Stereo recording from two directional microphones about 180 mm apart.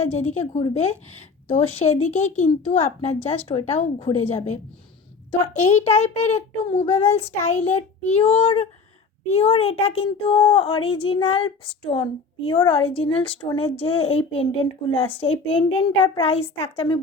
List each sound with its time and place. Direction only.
0.0 s speech: 40° left (ahead or behind)